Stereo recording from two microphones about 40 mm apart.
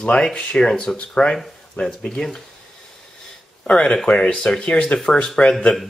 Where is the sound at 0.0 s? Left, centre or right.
Left.